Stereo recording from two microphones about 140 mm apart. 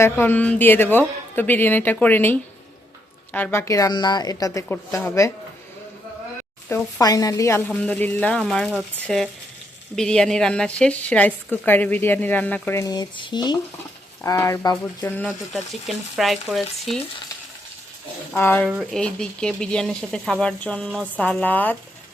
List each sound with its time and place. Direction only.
0.0 s a woman's voice: 15° left (ahead or behind)
6.7 s a woman's voice: 25° left (ahead or behind)
7.8 s speech: 10° left (ahead or behind)
12.8 s speech: 30° left (ahead or behind)
14.3 s a woman's voice: 20° left (ahead or behind)
15.9 s speech: centre (ahead or behind)
18.3 s speech: 15° left (ahead or behind)